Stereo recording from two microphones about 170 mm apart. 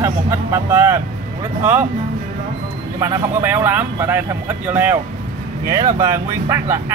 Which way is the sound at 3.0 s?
15° right (ahead or behind).